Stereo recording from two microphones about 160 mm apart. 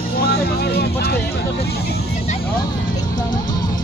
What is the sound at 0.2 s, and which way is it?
Music, 80° left.